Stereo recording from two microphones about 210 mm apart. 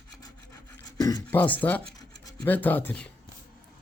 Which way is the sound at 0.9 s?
15° left (ahead or behind).